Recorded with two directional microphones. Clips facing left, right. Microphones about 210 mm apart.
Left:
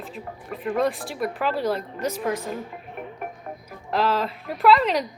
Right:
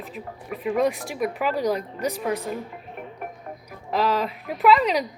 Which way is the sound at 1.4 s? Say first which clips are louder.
Even; 15° right (ahead or behind).